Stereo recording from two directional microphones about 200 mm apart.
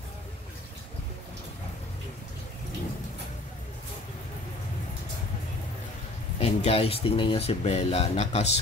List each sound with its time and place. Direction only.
6.4 s speech: 30° left (ahead or behind)